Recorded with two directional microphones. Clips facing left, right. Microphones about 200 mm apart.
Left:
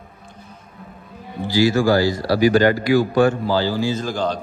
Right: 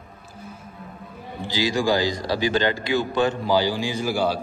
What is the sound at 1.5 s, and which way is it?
Speech, 15° right (ahead or behind).